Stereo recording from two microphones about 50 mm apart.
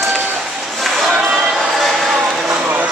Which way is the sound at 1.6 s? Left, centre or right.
Centre.